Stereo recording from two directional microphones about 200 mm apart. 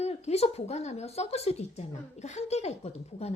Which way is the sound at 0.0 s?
30° left (ahead or behind).